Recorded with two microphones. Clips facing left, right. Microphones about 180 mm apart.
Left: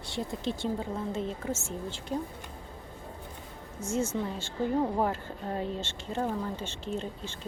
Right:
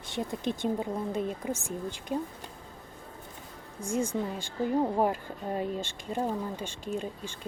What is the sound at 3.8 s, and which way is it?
Speech, 15° right (ahead or behind).